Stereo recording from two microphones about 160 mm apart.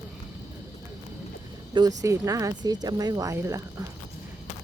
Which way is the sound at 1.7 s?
25° right (ahead or behind).